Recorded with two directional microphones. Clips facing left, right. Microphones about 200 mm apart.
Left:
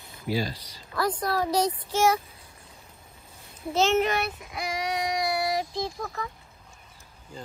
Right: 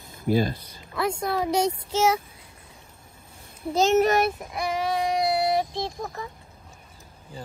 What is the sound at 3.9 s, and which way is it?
Speech, 45° right (ahead or behind).